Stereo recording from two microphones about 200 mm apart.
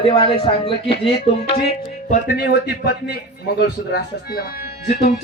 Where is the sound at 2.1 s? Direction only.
50° left (ahead or behind).